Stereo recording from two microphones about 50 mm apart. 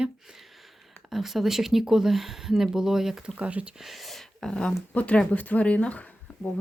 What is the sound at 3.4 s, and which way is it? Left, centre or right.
Speech, right.